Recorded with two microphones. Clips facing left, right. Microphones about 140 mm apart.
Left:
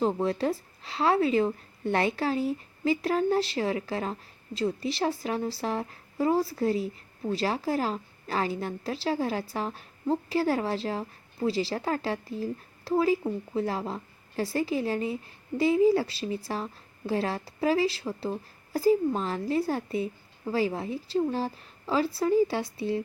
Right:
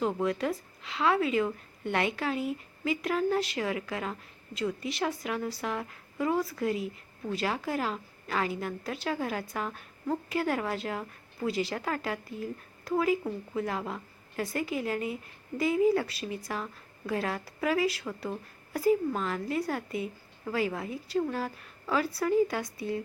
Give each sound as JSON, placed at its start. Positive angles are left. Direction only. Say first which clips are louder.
{"t": 0.0, "sound": "a woman's voice", "louder": "left 3 dB", "side_deg": 30}